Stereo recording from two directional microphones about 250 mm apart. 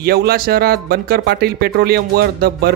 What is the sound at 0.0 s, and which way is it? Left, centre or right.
Speech, right.